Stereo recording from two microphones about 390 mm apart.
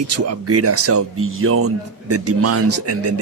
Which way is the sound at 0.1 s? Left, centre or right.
Right.